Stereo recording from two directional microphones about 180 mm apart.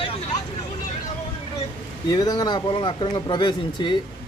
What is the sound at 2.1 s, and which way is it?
Speech, 20° left (ahead or behind).